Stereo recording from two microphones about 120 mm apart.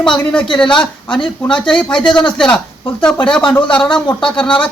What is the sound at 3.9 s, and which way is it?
Speech, 40° left (ahead or behind).